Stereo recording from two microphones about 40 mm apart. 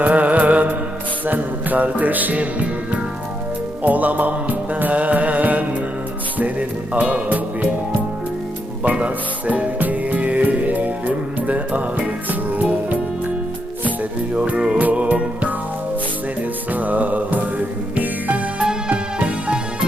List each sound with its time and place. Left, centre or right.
0.0 s music: right
8.8 s music: right
14.3 s music: right
16.7 s music: right
18.9 s music: right